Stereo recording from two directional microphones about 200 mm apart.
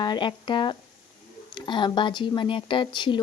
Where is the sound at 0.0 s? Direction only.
20° left (ahead or behind).